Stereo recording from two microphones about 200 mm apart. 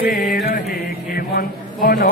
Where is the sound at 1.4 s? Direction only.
50° left (ahead or behind).